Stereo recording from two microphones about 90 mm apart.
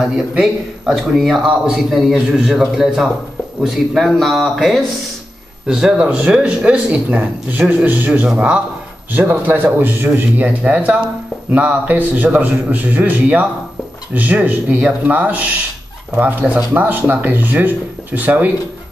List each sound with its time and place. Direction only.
0.4 s a man's voice: centre (ahead or behind); by 18.5 s 20° right (ahead or behind)